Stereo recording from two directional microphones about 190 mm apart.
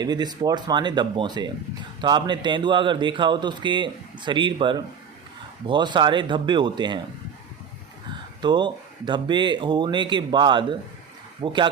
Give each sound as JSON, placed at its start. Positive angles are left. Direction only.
{"t": 0.0, "sound": "speech", "side_deg": -20}
{"t": 8.4, "sound": "speech", "side_deg": -25}